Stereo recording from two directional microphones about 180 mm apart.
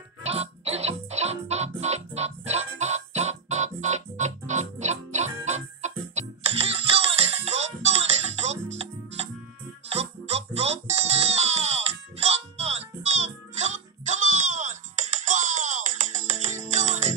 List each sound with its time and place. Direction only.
0.2 s music: 35° right (ahead or behind)